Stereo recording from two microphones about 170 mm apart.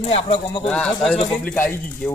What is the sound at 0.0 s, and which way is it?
Speech, 35° left (ahead or behind).